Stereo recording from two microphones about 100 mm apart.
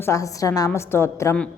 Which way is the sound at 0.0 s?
30° left (ahead or behind).